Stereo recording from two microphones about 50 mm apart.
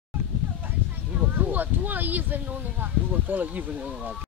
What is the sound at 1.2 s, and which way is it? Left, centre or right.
Speech, right.